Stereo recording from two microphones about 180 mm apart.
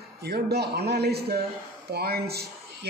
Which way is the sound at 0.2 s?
65° right (ahead or behind).